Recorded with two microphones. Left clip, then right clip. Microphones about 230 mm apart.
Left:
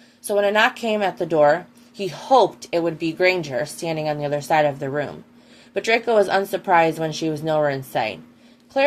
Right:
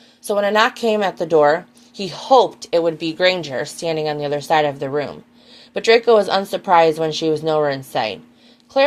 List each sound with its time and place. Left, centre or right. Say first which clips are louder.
0.3 s speech: right 2 dB; right